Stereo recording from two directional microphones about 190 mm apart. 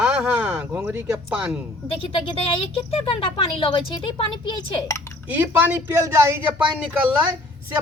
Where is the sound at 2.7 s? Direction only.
30° left (ahead or behind).